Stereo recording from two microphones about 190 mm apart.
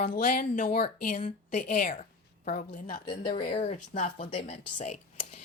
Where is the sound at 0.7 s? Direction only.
55° left (ahead or behind).